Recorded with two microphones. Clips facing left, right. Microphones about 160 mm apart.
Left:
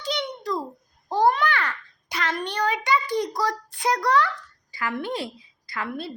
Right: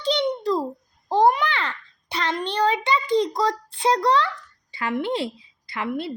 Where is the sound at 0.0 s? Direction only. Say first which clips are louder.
Right 7 dB; 30° right (ahead or behind).